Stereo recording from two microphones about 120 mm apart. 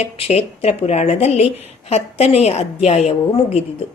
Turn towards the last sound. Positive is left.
turn(degrees=65)  # may be behind; listen again after turning